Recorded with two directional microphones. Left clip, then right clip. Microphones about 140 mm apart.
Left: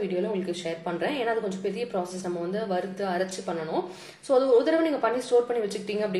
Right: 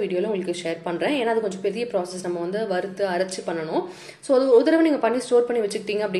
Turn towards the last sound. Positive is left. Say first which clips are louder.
# right 4 dB
turn(degrees=-35)  # may be behind; listen again after turning